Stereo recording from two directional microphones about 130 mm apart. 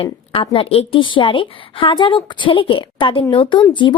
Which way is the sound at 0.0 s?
45° left (ahead or behind).